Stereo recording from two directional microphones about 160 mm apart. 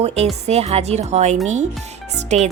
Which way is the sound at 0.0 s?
40° right (ahead or behind).